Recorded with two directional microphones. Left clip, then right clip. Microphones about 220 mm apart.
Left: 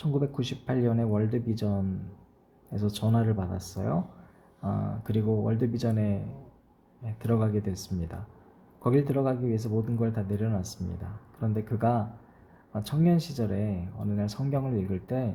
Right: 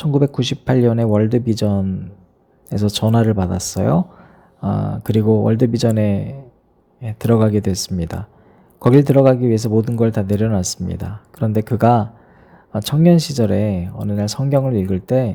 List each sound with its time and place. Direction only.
0.0 s speech: 35° right (ahead or behind)